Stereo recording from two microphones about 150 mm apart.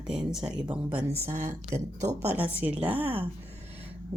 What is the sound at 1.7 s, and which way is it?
Speech, 20° right (ahead or behind).